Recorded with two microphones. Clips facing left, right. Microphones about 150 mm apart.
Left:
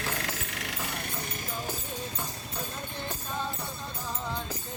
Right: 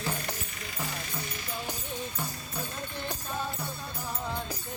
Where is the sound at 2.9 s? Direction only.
15° right (ahead or behind).